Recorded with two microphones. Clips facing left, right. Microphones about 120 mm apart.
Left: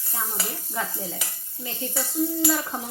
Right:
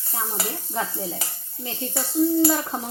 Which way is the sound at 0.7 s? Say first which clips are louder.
Right 2 dB; 30° right (ahead or behind).